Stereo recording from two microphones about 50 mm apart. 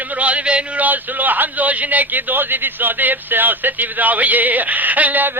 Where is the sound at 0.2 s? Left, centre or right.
Right.